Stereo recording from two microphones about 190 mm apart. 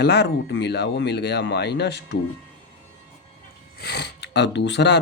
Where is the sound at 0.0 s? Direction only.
60° left (ahead or behind).